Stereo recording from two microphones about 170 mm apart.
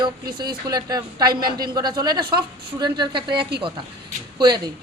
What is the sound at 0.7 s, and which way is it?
Speech, 20° right (ahead or behind).